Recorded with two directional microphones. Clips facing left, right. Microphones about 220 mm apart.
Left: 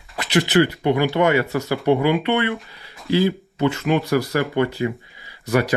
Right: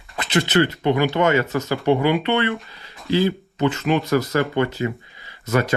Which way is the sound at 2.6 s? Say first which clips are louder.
Even; centre (ahead or behind).